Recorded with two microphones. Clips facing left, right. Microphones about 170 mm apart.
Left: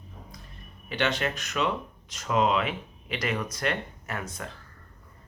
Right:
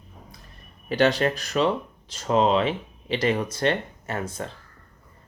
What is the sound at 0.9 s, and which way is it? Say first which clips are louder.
Speech: right 7 dB; 40° right (ahead or behind).